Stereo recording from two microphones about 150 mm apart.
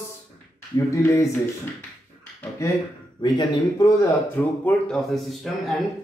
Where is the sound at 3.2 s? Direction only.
25° left (ahead or behind).